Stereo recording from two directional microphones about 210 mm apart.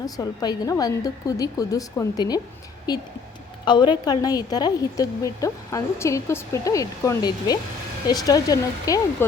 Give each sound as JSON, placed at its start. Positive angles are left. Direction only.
{"t": 0.0, "sound": "a woman's voice", "side_deg": 15}
{"t": 3.7, "sound": "a woman's voice", "side_deg": 20}